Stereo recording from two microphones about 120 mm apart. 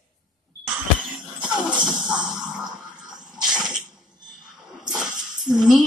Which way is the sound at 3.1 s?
5° right (ahead or behind).